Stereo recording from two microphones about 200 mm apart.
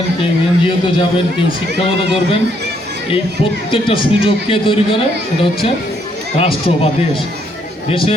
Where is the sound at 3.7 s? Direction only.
25° left (ahead or behind).